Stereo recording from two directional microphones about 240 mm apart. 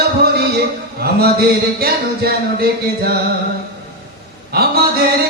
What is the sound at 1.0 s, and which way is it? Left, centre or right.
Speech, right.